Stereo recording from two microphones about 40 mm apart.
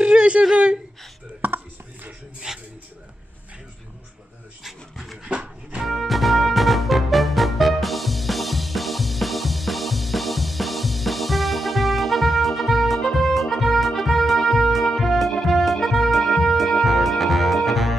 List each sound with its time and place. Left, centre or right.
0.0 s whimper: right
2.5 s a sound: centre
4.9 s dog: centre
5.2 s music: right
5.9 s music: centre